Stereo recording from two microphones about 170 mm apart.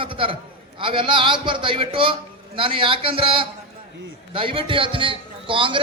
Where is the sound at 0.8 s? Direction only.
30° right (ahead or behind).